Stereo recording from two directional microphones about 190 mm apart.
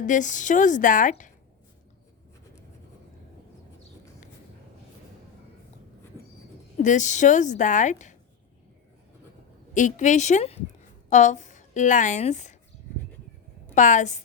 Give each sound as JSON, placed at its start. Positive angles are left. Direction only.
{"t": 0.0, "sound": "a woman's voice", "side_deg": 40}
{"t": 6.8, "sound": "a woman's voice", "side_deg": 40}
{"t": 9.7, "sound": "a woman's voice", "side_deg": 40}
{"t": 13.7, "sound": "a woman's voice", "side_deg": 40}